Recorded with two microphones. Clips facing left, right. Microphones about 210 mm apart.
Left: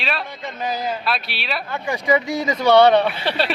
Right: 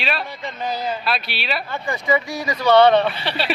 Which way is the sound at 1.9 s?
20° left (ahead or behind).